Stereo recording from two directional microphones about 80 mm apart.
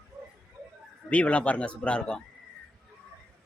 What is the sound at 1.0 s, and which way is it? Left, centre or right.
A man's voice, centre.